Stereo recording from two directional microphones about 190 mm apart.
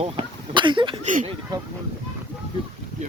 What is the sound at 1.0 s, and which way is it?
Speech, 45° right (ahead or behind).